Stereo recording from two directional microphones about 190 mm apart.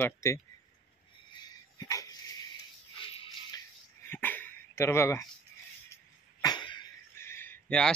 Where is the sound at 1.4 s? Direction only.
20° left (ahead or behind).